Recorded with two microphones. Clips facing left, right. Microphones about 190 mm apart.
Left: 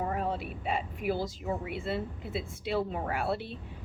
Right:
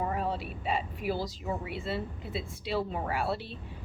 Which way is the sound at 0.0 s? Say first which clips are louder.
Even; 55° left (ahead or behind).